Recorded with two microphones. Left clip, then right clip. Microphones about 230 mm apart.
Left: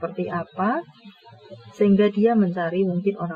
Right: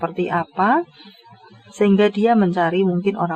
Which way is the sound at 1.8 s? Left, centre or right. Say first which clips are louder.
Right 3 dB; right.